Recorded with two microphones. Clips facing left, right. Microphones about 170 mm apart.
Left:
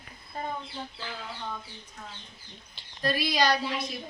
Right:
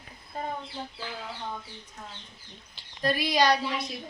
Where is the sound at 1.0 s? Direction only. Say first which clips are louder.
Right 1 dB; 15° right (ahead or behind).